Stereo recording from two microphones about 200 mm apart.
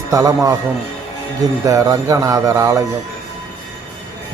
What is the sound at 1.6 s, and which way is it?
Speech, 15° right (ahead or behind).